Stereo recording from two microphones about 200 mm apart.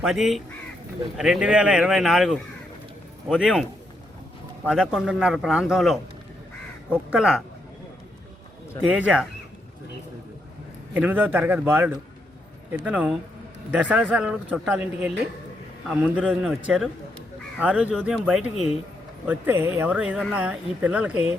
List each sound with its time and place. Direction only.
0.0 s speech: centre (ahead or behind)
4.7 s speech: 5° right (ahead or behind)
7.1 s speech: 5° right (ahead or behind)
8.9 s speech: 5° right (ahead or behind)
10.9 s speech: 10° right (ahead or behind)